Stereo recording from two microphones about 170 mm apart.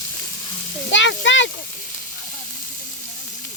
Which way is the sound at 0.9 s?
90° left.